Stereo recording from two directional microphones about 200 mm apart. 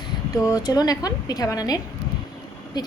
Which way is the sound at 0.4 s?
20° left (ahead or behind).